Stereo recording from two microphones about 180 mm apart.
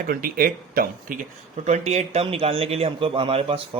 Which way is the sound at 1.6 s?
40° right (ahead or behind).